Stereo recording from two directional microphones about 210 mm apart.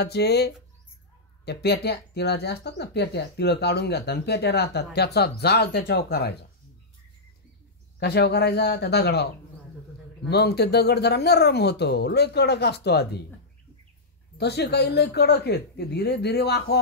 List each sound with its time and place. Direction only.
0.0 s speech: 50° left (ahead or behind)
8.0 s speech: 50° left (ahead or behind)
10.3 s speech: 50° left (ahead or behind)
14.4 s speech: 50° left (ahead or behind)